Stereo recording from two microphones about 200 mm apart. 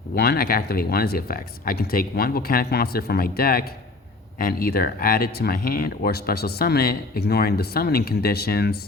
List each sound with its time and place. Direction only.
0.2 s speech: 50° left (ahead or behind)